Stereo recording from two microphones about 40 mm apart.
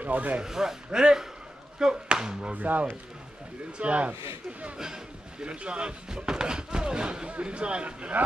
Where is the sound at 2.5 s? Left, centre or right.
Right.